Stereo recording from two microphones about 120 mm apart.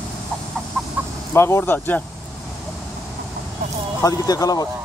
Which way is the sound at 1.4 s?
20° left (ahead or behind).